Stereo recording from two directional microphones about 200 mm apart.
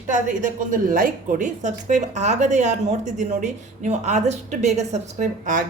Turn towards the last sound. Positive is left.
turn(degrees=-40)  # may be behind; listen again after turning